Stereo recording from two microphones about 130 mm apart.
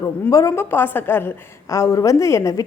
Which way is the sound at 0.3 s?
25° left (ahead or behind).